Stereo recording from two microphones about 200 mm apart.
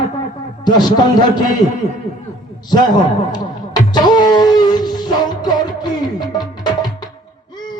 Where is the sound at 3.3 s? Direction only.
20° left (ahead or behind).